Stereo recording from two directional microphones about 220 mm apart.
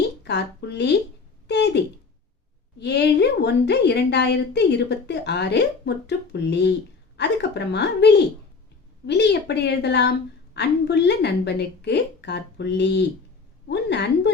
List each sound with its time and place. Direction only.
0.2 s speech: 50° left (ahead or behind)
1.5 s a sound: 50° left (ahead or behind)
2.7 s speech: 50° left (ahead or behind)